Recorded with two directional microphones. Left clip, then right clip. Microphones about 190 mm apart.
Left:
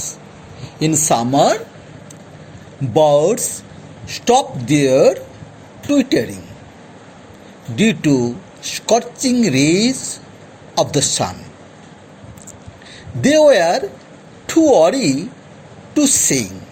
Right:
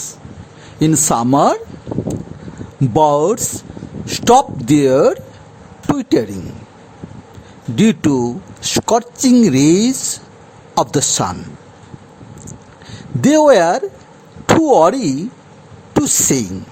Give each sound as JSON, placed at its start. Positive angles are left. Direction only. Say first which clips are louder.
{"t": 0.9, "sound": "a man's voice", "louder": "even", "side_deg": -35}
{"t": 2.9, "sound": "a man's voice", "louder": "even", "side_deg": -35}
{"t": 7.8, "sound": "a man's voice", "louder": "right 1 dB", "side_deg": -35}
{"t": 13.2, "sound": "a man's voice", "louder": "right 1 dB", "side_deg": -35}